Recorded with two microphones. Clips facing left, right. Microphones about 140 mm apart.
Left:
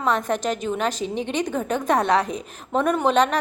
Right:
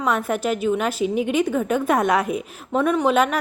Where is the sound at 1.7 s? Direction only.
10° right (ahead or behind).